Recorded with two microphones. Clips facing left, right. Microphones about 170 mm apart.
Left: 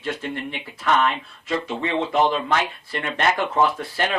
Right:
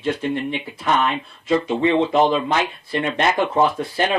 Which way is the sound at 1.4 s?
20° right (ahead or behind).